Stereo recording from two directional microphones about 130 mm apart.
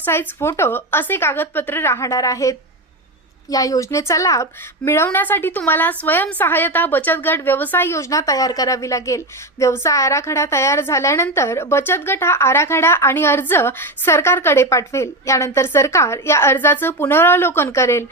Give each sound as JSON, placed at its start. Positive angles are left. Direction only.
{"t": 0.0, "sound": "a woman's voice", "side_deg": 15}